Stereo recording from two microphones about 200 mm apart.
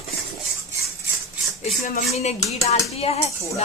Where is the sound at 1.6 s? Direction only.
40° left (ahead or behind).